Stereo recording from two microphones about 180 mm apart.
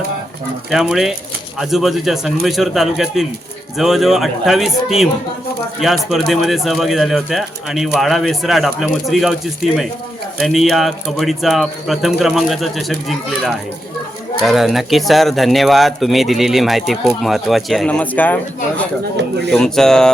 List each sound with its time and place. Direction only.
0.7 s speech: centre (ahead or behind)
10.3 s speech: centre (ahead or behind)
19.5 s speech: 5° left (ahead or behind)